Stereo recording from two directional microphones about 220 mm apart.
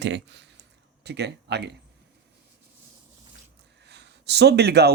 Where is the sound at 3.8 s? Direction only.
50° right (ahead or behind).